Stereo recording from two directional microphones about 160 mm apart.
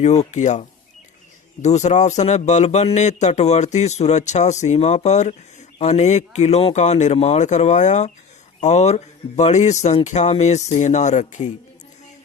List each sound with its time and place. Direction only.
0.0 s a man's voice: 45° left (ahead or behind)
1.6 s a man's voice: 45° left (ahead or behind)